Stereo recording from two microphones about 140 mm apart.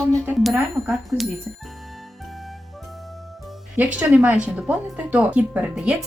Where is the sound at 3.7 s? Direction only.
10° right (ahead or behind).